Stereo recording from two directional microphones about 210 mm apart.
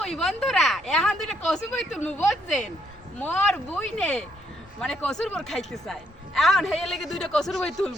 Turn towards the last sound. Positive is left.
turn(degrees=0)  # may be behind; listen again after turning